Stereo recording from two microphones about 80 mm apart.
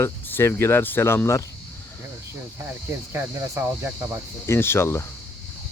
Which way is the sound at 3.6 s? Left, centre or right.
Right.